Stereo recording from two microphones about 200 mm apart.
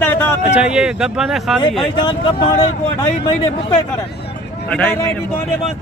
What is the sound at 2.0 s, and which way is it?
Speech, 20° left (ahead or behind).